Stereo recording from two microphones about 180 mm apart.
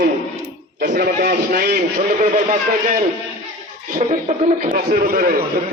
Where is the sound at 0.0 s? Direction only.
75° right (ahead or behind).